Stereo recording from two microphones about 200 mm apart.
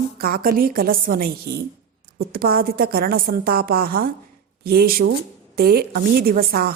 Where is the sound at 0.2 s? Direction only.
50° right (ahead or behind).